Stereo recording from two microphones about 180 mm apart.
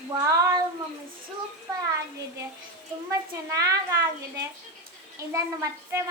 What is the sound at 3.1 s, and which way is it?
Speech, 20° right (ahead or behind).